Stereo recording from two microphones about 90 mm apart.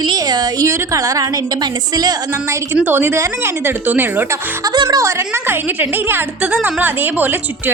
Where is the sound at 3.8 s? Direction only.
20° right (ahead or behind).